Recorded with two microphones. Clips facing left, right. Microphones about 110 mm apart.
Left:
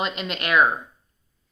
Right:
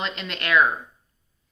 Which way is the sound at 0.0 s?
15° left (ahead or behind).